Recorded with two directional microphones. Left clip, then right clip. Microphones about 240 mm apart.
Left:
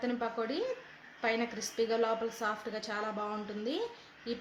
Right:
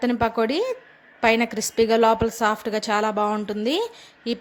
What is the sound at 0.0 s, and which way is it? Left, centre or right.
Speech, right.